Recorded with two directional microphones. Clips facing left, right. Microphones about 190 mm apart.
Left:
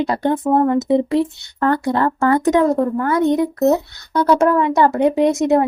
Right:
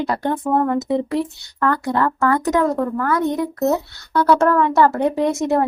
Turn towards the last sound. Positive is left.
turn(degrees=15)  # may be behind; listen again after turning